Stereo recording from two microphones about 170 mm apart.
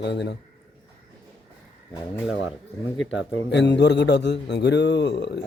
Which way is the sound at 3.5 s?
90° left.